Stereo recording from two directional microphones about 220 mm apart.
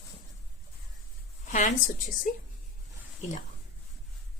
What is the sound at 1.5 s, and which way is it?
Speech, 35° left (ahead or behind).